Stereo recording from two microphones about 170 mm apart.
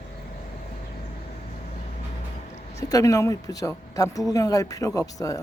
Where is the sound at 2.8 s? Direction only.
20° left (ahead or behind).